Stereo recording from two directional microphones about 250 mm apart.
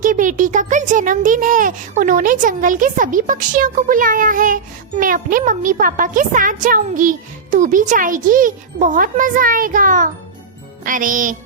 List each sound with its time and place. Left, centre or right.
0.0 s a child's voice: right